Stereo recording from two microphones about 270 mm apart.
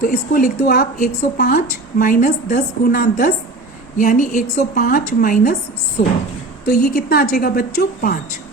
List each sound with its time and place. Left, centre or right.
0.0 s a woman's voice: left
6.7 s a woman's voice: left